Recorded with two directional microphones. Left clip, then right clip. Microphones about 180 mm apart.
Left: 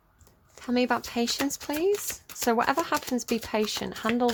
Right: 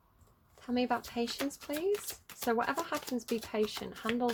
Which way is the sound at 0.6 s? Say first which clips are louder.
Left 7 dB; 40° left (ahead or behind).